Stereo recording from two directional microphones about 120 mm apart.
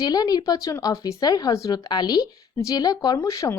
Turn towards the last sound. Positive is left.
turn(degrees=25)  # may be behind; listen again after turning